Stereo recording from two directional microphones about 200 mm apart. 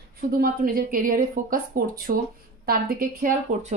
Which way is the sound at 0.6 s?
45° right (ahead or behind).